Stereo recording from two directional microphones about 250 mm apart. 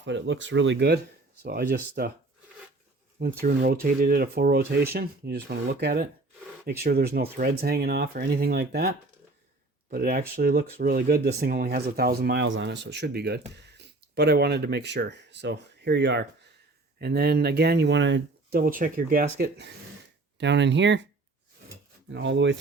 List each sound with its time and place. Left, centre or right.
0.0 s speech: right
3.4 s speech: right
22.1 s speech: right